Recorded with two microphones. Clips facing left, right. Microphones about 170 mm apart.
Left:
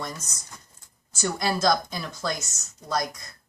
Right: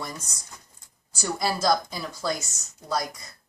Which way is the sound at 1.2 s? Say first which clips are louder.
Left 1 dB; 5° right (ahead or behind).